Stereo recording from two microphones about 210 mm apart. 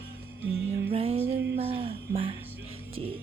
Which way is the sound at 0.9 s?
30° right (ahead or behind).